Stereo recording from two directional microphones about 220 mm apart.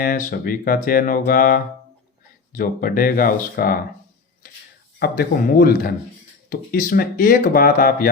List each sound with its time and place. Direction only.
0.0 s speech: 40° left (ahead or behind)
4.9 s speech: 45° left (ahead or behind)